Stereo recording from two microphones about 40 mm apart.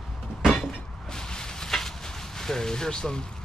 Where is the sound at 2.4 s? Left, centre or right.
Centre.